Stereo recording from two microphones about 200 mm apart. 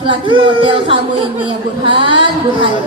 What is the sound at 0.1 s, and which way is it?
Speech, 25° right (ahead or behind).